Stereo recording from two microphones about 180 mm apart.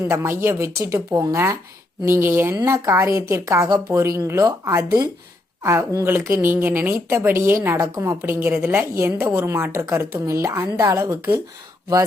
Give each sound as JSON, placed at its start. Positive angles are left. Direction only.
{"t": 0.1, "sound": "speech", "side_deg": -15}